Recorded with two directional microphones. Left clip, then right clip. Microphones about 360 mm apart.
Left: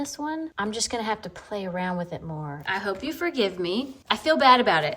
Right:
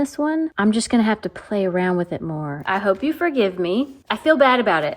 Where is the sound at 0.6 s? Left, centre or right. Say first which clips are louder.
Right 8 dB; right.